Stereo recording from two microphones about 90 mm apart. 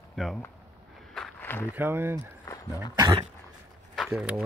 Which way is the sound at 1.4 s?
20° left (ahead or behind).